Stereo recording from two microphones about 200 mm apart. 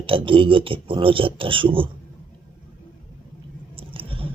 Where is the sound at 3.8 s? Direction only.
25° right (ahead or behind).